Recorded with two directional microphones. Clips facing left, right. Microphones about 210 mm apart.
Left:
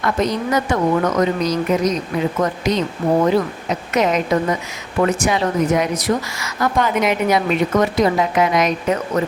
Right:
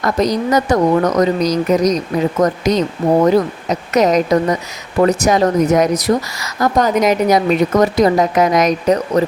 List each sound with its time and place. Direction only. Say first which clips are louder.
0.0 s speech: right 4 dB; 40° right (ahead or behind)